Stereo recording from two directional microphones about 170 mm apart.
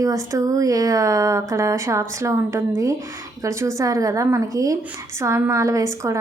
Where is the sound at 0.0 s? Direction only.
20° right (ahead or behind).